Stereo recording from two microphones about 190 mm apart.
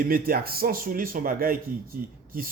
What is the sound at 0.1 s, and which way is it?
Speech, 50° right (ahead or behind).